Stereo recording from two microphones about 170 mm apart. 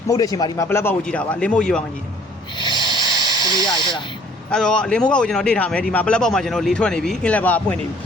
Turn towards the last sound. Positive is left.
turn(degrees=10)  # may be behind; listen again after turning